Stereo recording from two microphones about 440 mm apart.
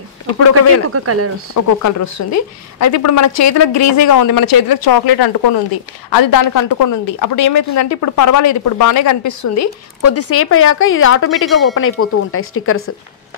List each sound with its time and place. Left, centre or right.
0.9 s speech: right
1.5 s speech: left